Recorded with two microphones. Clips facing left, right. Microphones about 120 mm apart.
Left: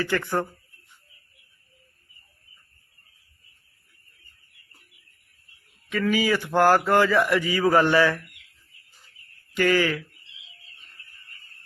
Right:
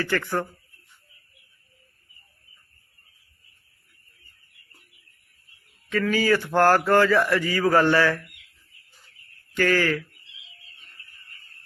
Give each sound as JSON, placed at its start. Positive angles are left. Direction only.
{"t": 0.0, "sound": "speech", "side_deg": 15}
{"t": 5.9, "sound": "speech", "side_deg": 15}
{"t": 9.6, "sound": "speech", "side_deg": 15}